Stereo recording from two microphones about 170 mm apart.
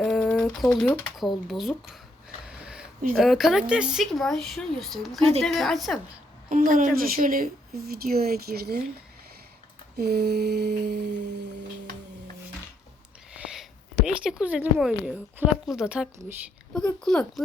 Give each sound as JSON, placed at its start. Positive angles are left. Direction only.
{"t": 0.0, "sound": "typing", "side_deg": 0}
{"t": 1.5, "sound": "speech", "side_deg": 0}
{"t": 3.2, "sound": "speech", "side_deg": 0}
{"t": 6.5, "sound": "a woman's voice", "side_deg": -50}
{"t": 10.0, "sound": "mantra", "side_deg": -70}
{"t": 13.5, "sound": "speech", "side_deg": -5}